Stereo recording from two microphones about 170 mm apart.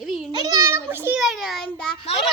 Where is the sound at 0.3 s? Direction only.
25° right (ahead or behind).